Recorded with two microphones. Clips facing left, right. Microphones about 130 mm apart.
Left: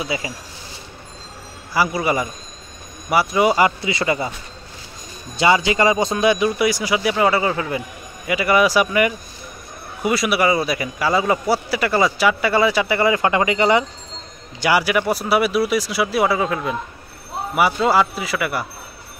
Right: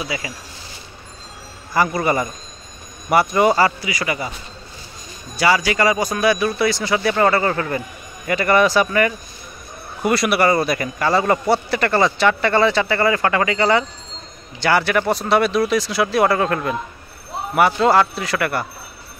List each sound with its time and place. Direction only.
0.0 s speech: 25° left (ahead or behind)
1.7 s speech: 5° left (ahead or behind); by 4.3 s 25° left (ahead or behind)
5.4 s speech: 20° left (ahead or behind)
10.0 s a man's voice: centre (ahead or behind)